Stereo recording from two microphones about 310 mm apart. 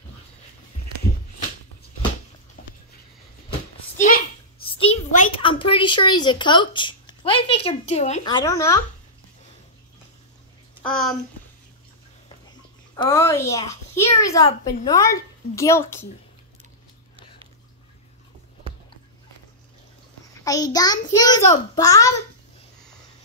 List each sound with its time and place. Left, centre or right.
2.6 s a sound: left
4.0 s a child's voice: left; by 8.8 s centre
10.8 s a child's voice: centre
12.4 s a child's voice: centre
20.4 s a child's voice: centre